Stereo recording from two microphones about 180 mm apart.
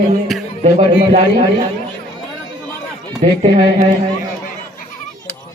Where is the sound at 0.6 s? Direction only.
40° right (ahead or behind).